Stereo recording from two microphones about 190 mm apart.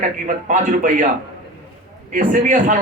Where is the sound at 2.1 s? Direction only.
40° right (ahead or behind).